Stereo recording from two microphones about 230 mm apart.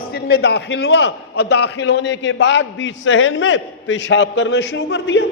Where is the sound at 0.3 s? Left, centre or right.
Left.